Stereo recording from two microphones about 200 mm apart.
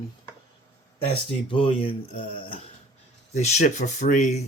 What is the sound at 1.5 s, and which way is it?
Speech, 30° left (ahead or behind).